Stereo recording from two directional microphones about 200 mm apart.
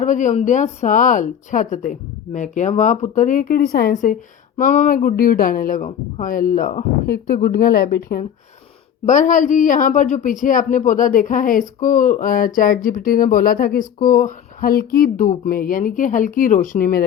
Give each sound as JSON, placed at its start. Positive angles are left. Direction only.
{"t": 0.0, "sound": "speech", "side_deg": 40}
{"t": 9.0, "sound": "speech", "side_deg": 40}